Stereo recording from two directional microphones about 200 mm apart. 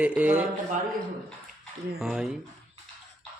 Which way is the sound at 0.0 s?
5° right (ahead or behind).